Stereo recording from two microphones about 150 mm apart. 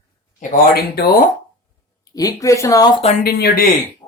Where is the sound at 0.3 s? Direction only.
75° left (ahead or behind); by 1.1 s 90° left.